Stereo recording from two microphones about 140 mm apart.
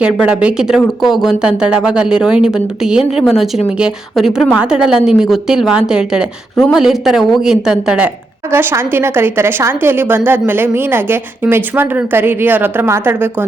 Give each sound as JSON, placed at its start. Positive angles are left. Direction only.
{"t": 0.0, "sound": "a woman's voice", "side_deg": -10}